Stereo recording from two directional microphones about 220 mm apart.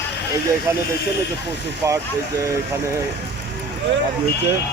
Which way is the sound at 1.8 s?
15° right (ahead or behind).